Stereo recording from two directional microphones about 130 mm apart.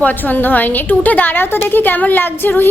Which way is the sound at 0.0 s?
15° left (ahead or behind).